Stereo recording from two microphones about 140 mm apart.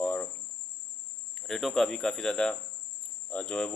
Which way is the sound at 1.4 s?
Centre (ahead or behind).